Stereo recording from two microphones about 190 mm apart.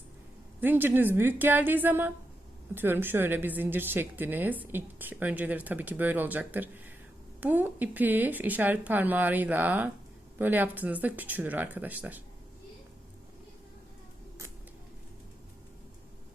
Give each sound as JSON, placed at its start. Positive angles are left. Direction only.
{"t": 0.6, "sound": "a woman's voice", "side_deg": -10}